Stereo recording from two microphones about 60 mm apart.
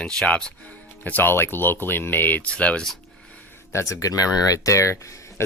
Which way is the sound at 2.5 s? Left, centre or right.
Left.